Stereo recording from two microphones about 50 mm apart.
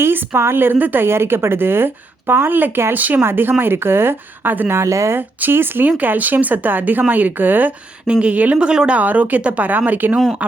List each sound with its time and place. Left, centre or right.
0.0 s a woman's voice: right
1.0 s a woman's voice: right
3.2 s a woman's voice: right
4.7 s speech: right
5.1 s a woman's voice: right
6.0 s speech: right
8.0 s speech: right
8.5 s speech: centre
9.0 s speech: right